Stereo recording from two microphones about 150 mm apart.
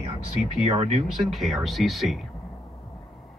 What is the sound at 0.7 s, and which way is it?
Speech, 40° right (ahead or behind).